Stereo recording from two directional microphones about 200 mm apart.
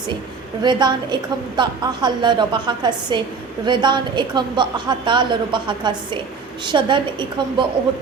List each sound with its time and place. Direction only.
0.6 s a woman's voice: 20° right (ahead or behind)